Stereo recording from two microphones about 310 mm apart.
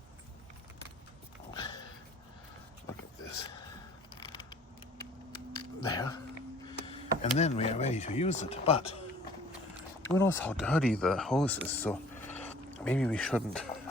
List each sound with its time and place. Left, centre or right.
1.5 s dog: centre
5.9 s speech: centre
6.7 s a sound: centre
7.2 s speech: left
10.1 s speech: centre